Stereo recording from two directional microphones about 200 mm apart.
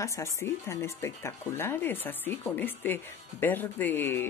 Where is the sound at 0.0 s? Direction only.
15° left (ahead or behind).